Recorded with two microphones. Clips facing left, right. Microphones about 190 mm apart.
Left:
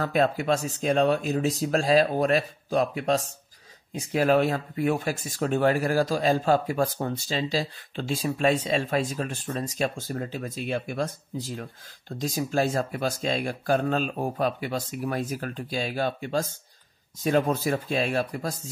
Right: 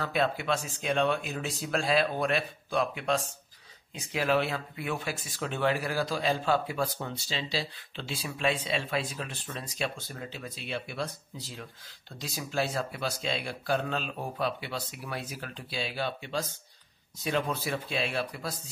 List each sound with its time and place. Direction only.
0.0 s speech: 45° left (ahead or behind)